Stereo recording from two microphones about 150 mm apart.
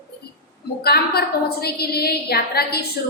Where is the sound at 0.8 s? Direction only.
90° left.